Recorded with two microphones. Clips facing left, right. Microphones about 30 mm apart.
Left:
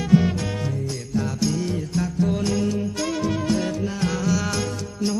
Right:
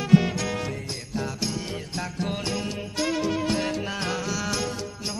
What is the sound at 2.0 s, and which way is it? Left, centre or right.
Music, right.